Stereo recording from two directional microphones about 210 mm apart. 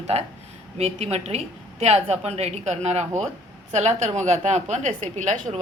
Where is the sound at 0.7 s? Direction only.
30° right (ahead or behind).